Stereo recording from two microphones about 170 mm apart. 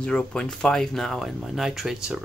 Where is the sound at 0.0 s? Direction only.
5° left (ahead or behind).